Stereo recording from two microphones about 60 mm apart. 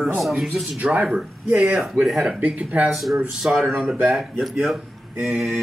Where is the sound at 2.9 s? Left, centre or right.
Centre.